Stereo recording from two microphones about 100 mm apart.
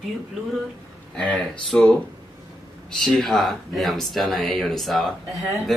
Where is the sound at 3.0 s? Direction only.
Centre (ahead or behind).